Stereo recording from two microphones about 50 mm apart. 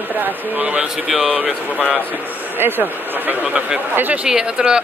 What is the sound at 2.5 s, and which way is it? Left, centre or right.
Speech, right.